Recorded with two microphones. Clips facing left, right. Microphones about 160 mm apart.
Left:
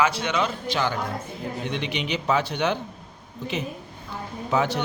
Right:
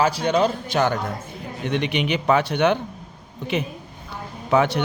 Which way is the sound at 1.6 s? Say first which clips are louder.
Right 8 dB; 60° right (ahead or behind).